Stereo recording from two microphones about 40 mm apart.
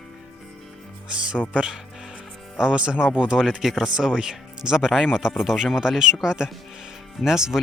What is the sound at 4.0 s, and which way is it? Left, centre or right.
Speech, centre.